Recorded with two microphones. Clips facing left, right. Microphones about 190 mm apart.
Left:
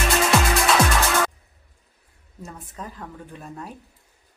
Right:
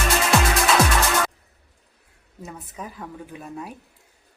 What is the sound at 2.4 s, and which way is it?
A woman's voice, 5° right (ahead or behind).